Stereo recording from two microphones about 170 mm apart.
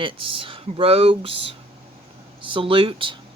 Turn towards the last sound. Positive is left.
turn(degrees=-30)  # may be behind; listen again after turning